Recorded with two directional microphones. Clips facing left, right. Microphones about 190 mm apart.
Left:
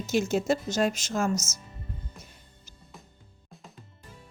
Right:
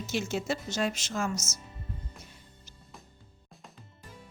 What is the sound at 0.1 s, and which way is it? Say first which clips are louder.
A woman's voice: left 7 dB; 45° left (ahead or behind).